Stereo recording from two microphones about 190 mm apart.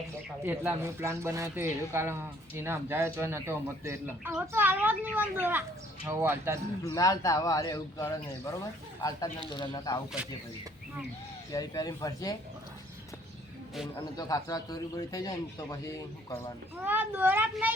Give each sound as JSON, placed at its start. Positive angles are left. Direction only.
{"t": 0.4, "sound": "a man's voice", "side_deg": -10}
{"t": 6.8, "sound": "a man's voice", "side_deg": 20}
{"t": 11.5, "sound": "a man's voice", "side_deg": 20}
{"t": 13.9, "sound": "a man's voice", "side_deg": 20}
{"t": 16.7, "sound": "a man's voice", "side_deg": -10}